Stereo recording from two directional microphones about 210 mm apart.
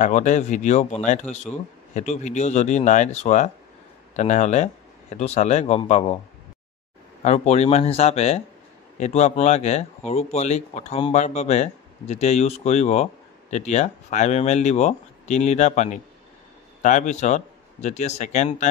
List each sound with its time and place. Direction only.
0.0 s speech: 35° left (ahead or behind)
7.2 s speech: 30° left (ahead or behind)